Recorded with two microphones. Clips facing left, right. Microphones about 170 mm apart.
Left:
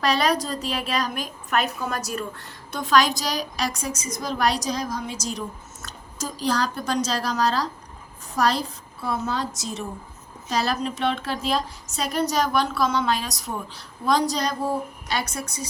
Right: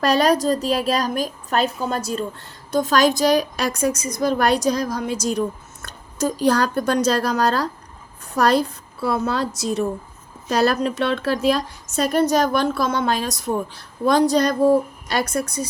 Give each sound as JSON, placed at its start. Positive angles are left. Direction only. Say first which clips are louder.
{"t": 0.0, "sound": "a woman's voice", "louder": "right 5 dB", "side_deg": -45}
{"t": 2.7, "sound": "a woman's voice", "louder": "right 4 dB", "side_deg": -45}
{"t": 5.8, "sound": "a sound", "louder": "right 10 dB", "side_deg": -60}
{"t": 6.4, "sound": "a woman's voice", "louder": "right 6 dB", "side_deg": -60}